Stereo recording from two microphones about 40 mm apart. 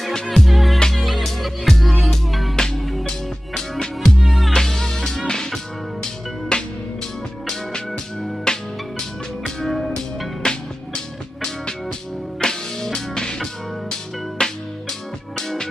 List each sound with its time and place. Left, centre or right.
0.1 s music: centre
0.5 s music: centre
2.5 s music: centre
3.8 s music: centre
4.3 s music: centre
4.6 s music: centre
7.7 s music: centre
9.6 s music: centre
10.4 s music: left
12.4 s music: centre
14.4 s music: centre